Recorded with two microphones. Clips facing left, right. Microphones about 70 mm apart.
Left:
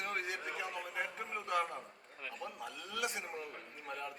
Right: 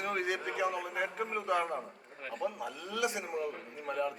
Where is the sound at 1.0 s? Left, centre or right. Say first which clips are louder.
Right 7 dB; right.